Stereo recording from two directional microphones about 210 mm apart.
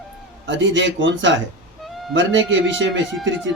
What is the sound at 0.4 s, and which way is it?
Speech, 60° right (ahead or behind).